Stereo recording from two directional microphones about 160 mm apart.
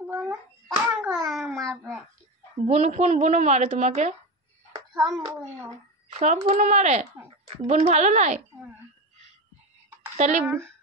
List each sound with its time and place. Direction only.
0.7 s a sound: centre (ahead or behind)
2.6 s a child's voice: 45° right (ahead or behind)
4.9 s a child's voice: centre (ahead or behind)
6.1 s a child's voice: 45° right (ahead or behind)
10.1 s speech: 45° right (ahead or behind)